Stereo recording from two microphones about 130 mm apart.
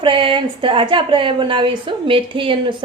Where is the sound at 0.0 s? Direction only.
40° right (ahead or behind).